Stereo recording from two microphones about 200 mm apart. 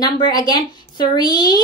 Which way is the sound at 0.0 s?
20° left (ahead or behind).